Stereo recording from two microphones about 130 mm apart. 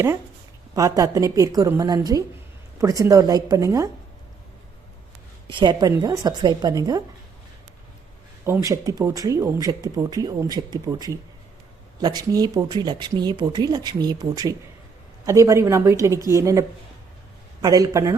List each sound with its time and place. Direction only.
0.8 s speech: 30° right (ahead or behind)
5.5 s speech: 35° right (ahead or behind)
8.4 s speech: 20° right (ahead or behind)